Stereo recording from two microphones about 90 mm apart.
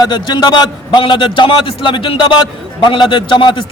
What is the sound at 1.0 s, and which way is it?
A man's voice, 65° left (ahead or behind).